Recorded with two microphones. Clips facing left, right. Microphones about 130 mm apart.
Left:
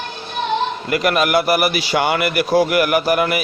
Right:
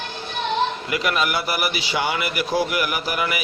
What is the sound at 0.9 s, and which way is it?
A man's voice, 55° left (ahead or behind).